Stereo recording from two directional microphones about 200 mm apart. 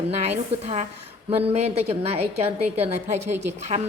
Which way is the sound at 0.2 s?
35° right (ahead or behind).